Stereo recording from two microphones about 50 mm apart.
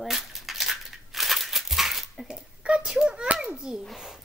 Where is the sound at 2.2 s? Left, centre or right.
Centre.